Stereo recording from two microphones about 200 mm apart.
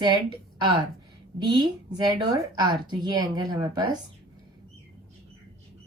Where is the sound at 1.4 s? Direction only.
20° right (ahead or behind).